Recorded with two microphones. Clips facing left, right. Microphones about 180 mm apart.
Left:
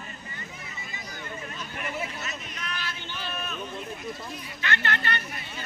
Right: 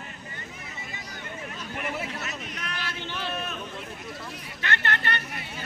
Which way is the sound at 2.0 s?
65° right (ahead or behind).